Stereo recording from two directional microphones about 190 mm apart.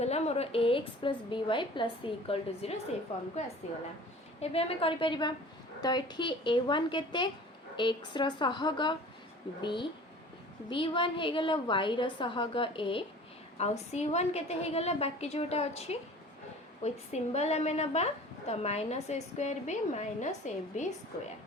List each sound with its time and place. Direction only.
0.0 s a woman's voice: 35° left (ahead or behind)
4.4 s a woman's voice: 30° left (ahead or behind)